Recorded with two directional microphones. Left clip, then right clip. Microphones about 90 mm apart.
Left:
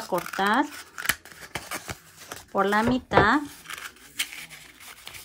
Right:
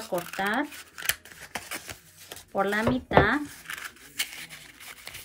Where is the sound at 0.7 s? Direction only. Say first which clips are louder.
Left 3 dB; 35° left (ahead or behind).